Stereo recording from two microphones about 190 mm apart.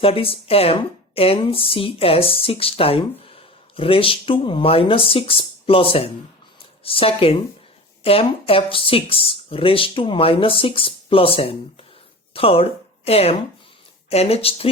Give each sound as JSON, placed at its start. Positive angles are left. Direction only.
{"t": 0.0, "sound": "a woman's voice", "side_deg": 30}